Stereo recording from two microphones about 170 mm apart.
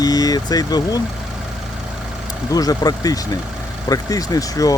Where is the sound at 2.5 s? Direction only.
20° left (ahead or behind).